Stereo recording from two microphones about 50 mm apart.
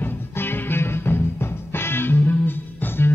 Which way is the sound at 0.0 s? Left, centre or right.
Left.